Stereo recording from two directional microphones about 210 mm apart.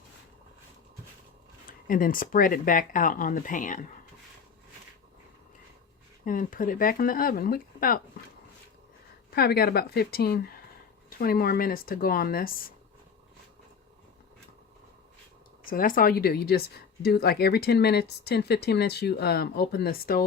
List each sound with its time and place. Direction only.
1.9 s speech: 40° left (ahead or behind)
6.2 s speech: 40° left (ahead or behind)
9.3 s speech: 45° left (ahead or behind)
15.6 s speech: 40° left (ahead or behind)